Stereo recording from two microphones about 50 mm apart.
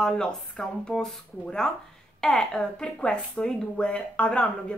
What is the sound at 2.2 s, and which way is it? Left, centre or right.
Speech, centre.